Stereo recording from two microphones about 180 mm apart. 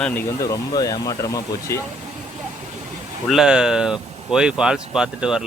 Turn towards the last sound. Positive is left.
turn(degrees=-5)  # may be behind; listen again after turning